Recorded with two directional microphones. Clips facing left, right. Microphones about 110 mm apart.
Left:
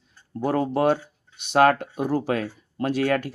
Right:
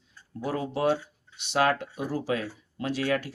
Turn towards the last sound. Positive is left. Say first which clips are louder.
# left 5 dB
turn(degrees=50)  # may be behind; listen again after turning